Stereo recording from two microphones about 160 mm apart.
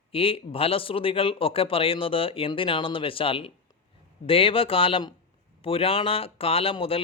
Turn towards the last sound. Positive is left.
turn(degrees=35)  # may be behind; listen again after turning